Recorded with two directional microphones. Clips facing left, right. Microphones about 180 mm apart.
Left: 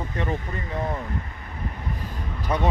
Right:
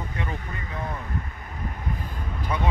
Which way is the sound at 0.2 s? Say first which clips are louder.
Left 7 dB; 40° left (ahead or behind).